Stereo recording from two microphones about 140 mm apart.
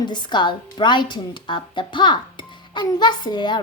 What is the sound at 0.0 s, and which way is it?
A woman's voice, 30° left (ahead or behind).